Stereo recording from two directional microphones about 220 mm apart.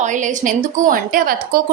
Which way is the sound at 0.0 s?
35° right (ahead or behind).